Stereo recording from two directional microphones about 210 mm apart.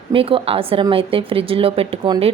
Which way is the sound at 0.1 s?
25° right (ahead or behind).